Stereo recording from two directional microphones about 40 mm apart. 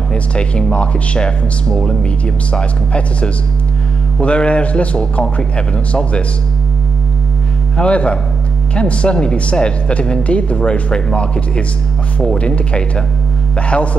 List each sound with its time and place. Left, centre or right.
0.1 s speech: left
7.7 s speech: left